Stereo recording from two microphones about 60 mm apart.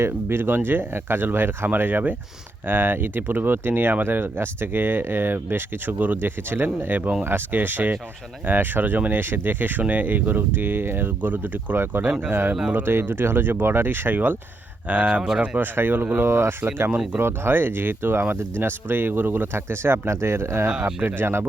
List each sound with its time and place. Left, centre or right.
0.0 s speech: right
21.0 s speech: right